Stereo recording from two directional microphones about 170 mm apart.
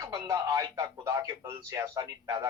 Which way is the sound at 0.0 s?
20° right (ahead or behind).